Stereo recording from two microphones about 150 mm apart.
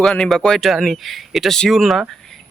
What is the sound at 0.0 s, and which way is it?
Speech, 5° left (ahead or behind).